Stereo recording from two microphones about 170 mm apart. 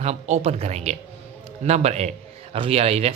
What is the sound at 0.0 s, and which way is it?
A man's voice, 35° right (ahead or behind).